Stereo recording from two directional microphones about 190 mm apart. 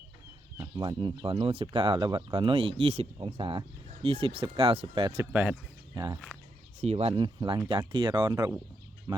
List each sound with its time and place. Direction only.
0.8 s speech: 25° right (ahead or behind)
5.3 s speech: 10° right (ahead or behind)
5.9 s speech: 20° right (ahead or behind)
6.8 s speech: 30° right (ahead or behind)